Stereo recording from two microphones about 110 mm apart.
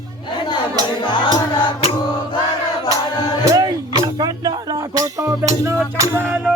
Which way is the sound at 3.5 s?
40° right (ahead or behind).